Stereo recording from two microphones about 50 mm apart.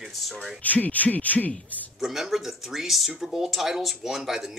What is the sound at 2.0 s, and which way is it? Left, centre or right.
Speech, centre.